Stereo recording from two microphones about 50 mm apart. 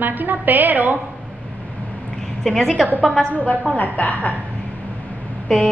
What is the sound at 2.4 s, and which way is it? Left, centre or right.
Speech, centre.